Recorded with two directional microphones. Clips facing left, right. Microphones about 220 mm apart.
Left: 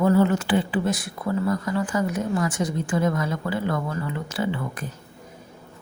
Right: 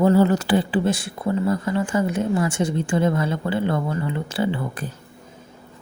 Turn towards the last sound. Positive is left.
turn(degrees=-30)  # may be behind; listen again after turning